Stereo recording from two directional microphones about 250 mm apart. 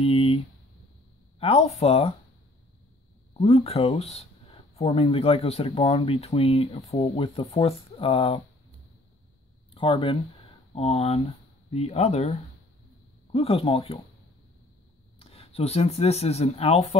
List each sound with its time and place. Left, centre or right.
0.0 s speech: left
1.4 s speech: left
3.3 s speech: left
9.8 s speech: centre
15.1 s speech: left